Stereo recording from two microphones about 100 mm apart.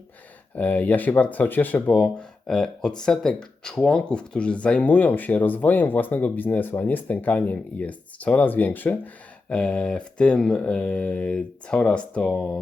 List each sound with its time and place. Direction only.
0.5 s speech: 15° left (ahead or behind)